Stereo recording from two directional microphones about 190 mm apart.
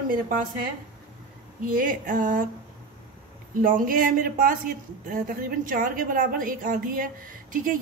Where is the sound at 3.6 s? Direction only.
45° right (ahead or behind).